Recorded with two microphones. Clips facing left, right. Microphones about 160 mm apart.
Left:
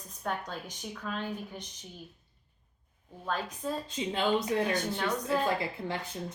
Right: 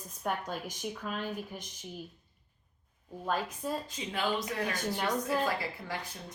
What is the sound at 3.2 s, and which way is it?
Speech, 10° right (ahead or behind).